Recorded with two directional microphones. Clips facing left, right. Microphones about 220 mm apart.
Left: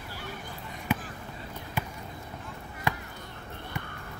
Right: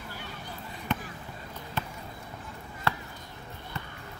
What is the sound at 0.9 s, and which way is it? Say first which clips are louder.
Basketball bounce: left 2 dB; 10° left (ahead or behind).